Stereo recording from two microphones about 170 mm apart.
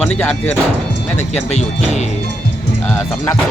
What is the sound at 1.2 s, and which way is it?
Speech, 40° left (ahead or behind).